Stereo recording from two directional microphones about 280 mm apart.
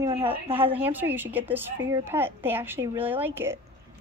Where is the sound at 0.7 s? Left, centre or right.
Centre.